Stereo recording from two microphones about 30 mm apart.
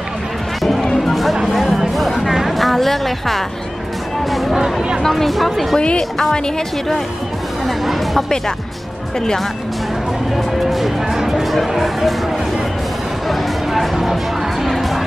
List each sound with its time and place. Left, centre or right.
0.6 s music: centre
2.5 s a woman's voice: centre
4.6 s chatter: centre
5.0 s speech: centre
5.8 s a woman's voice: left
6.1 s a woman's voice: left
7.6 s speech: centre
10.3 s speech: centre
11.1 s speech: centre
13.7 s a sound: centre